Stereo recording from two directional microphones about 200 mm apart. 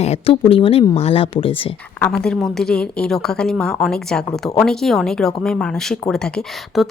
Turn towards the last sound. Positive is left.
turn(degrees=0)  # may be behind; listen again after turning